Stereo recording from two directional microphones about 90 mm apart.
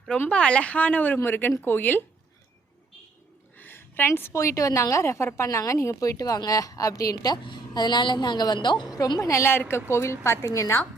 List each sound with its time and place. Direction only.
0.3 s a woman's voice: 10° left (ahead or behind)
3.6 s a woman's voice: 25° left (ahead or behind); by 7.3 s 40° left (ahead or behind)
7.4 s a woman's voice: 55° left (ahead or behind)
9.0 s a woman's voice: 45° left (ahead or behind)
9.3 s a woman's voice: 30° left (ahead or behind)